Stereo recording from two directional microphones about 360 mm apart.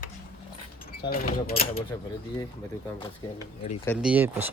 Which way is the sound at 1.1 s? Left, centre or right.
Left.